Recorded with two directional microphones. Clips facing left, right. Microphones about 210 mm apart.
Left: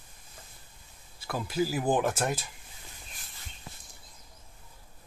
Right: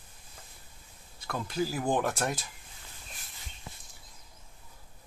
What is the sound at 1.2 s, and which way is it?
Speech, 5° left (ahead or behind).